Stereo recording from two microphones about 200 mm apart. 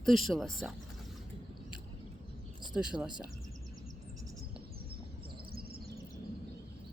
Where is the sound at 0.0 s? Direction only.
Centre (ahead or behind).